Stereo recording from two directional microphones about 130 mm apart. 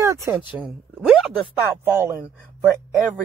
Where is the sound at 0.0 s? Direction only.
25° right (ahead or behind).